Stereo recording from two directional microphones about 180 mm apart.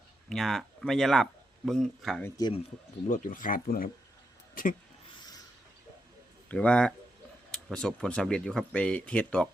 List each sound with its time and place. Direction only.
0.3 s speech: centre (ahead or behind)
2.2 s speech: 20° left (ahead or behind)
3.1 s speech: 50° left (ahead or behind)
6.5 s speech: 5° left (ahead or behind)